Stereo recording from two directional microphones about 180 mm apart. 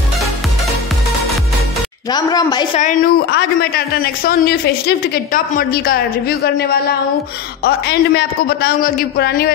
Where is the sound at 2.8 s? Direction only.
50° left (ahead or behind).